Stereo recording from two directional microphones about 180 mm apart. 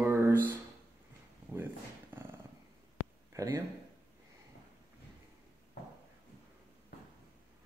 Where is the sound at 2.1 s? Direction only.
10° right (ahead or behind).